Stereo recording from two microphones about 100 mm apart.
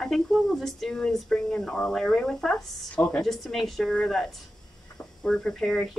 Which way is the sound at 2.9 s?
15° left (ahead or behind).